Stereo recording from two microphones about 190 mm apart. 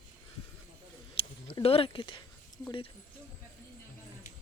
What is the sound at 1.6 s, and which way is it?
Speech, 30° left (ahead or behind).